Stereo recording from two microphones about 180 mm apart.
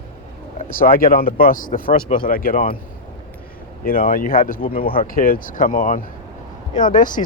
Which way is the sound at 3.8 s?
55° left (ahead or behind).